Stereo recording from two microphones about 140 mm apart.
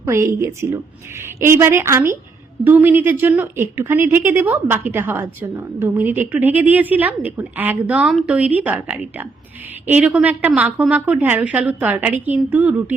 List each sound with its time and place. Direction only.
0.0 s a woman's voice: 20° right (ahead or behind)